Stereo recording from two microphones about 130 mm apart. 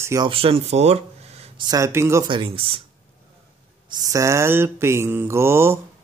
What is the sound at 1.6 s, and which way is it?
Speech, 30° right (ahead or behind).